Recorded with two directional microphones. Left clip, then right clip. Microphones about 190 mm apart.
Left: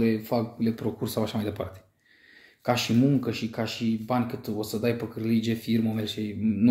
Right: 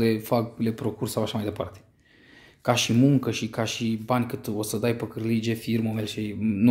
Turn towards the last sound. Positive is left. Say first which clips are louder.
# right 1 dB
turn(degrees=-35)  # may be behind; listen again after turning